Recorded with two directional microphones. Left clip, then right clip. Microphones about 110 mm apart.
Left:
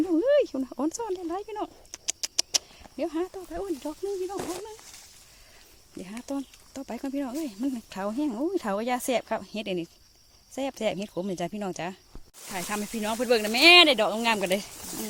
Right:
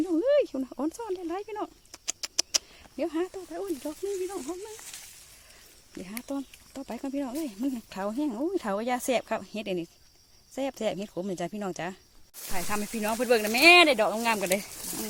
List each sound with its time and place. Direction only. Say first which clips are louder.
0.1 s a sound: left 1 dB; centre (ahead or behind)
1.3 s a woman's voice: left 1 dB; 10° right (ahead or behind)
2.0 s rodents: left 2 dB; 10° right (ahead or behind)
3.0 s a woman's voice: even; 15° right (ahead or behind)
5.9 s speech: left 1 dB; 5° right (ahead or behind)
9.0 s a woman's voice: even; 15° right (ahead or behind); by 14.1 s 5° left (ahead or behind)
14.1 s speech: left 1 dB; 20° left (ahead or behind)